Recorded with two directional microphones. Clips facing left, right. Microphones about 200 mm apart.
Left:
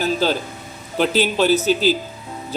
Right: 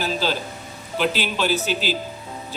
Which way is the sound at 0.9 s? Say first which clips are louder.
Left 5 dB; 40° left (ahead or behind).